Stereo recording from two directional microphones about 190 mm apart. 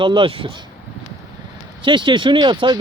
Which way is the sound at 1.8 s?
25° right (ahead or behind).